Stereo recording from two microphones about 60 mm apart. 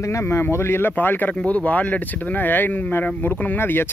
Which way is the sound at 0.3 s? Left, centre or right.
Left.